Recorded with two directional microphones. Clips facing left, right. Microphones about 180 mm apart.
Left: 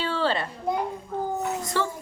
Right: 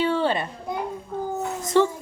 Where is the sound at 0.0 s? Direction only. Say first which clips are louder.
Right 4 dB; 20° right (ahead or behind).